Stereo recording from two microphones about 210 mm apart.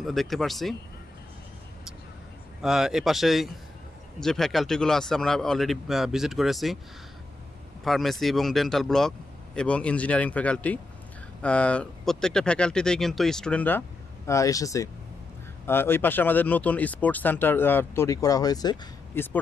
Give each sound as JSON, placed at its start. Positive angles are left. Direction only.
{"t": 0.0, "sound": "speech", "side_deg": 0}
{"t": 2.6, "sound": "speech", "side_deg": 0}
{"t": 7.8, "sound": "speech", "side_deg": 0}